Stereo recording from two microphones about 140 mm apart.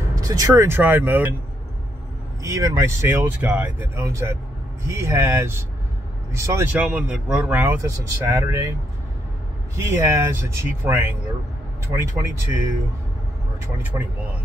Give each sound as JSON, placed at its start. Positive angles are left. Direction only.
{"t": 0.2, "sound": "speech", "side_deg": -25}
{"t": 2.4, "sound": "speech", "side_deg": -20}
{"t": 9.8, "sound": "speech", "side_deg": -20}
{"t": 13.9, "sound": "speech", "side_deg": -10}